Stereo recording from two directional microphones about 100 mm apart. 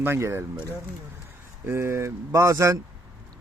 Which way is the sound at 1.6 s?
25° right (ahead or behind).